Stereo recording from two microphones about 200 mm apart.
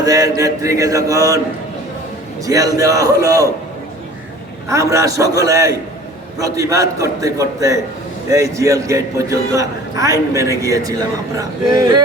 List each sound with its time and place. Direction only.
0.0 s a man's voice: 15° right (ahead or behind)
2.4 s a man's voice: 15° right (ahead or behind)
4.7 s a man's voice: 15° right (ahead or behind)